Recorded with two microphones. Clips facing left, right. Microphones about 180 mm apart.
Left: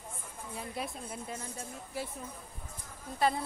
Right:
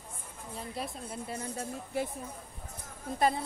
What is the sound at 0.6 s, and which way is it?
Speech, centre (ahead or behind).